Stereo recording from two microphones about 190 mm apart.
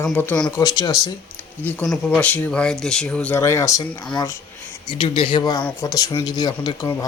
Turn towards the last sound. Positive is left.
turn(degrees=15)  # may be behind; listen again after turning